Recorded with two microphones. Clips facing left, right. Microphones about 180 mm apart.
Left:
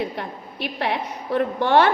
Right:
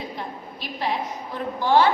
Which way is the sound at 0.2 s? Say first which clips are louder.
Left 4 dB; 65° left (ahead or behind).